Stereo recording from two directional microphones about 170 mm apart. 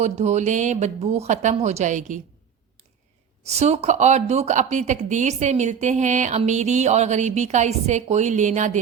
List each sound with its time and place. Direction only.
0.0 s speech: 40° right (ahead or behind)
3.4 s speech: 40° right (ahead or behind)